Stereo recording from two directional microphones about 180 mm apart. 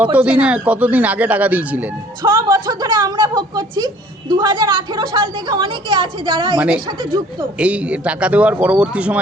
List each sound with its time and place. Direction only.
0.0 s a man's voice: 10° right (ahead or behind)
2.2 s a woman's voice: 25° right (ahead or behind)
6.6 s a man's voice: 5° right (ahead or behind)